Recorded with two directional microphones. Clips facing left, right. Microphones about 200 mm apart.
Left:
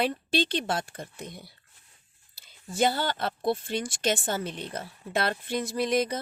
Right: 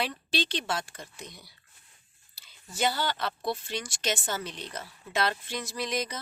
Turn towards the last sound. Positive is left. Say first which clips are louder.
# left 6 dB
turn(degrees=55)  # may be behind; listen again after turning